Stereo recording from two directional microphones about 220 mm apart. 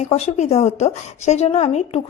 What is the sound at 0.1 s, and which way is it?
A woman's voice, 30° left (ahead or behind).